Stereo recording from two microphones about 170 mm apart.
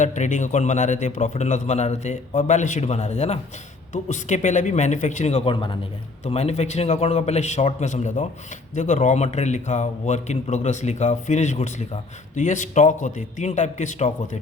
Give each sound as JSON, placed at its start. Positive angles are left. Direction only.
{"t": 0.0, "sound": "a man's voice", "side_deg": 45}
{"t": 6.2, "sound": "a man's voice", "side_deg": 40}